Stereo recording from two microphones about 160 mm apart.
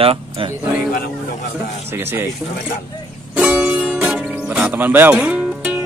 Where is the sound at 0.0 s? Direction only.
35° right (ahead or behind).